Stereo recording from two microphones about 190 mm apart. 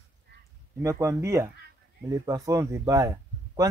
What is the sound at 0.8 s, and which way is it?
Speech, 15° right (ahead or behind).